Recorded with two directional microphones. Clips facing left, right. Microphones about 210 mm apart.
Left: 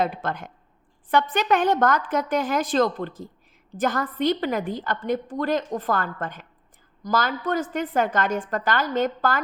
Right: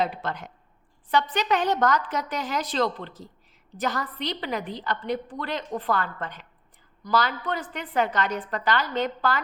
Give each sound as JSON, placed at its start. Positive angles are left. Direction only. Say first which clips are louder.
{"t": 0.0, "sound": "a woman's voice", "louder": "left 2 dB", "side_deg": 50}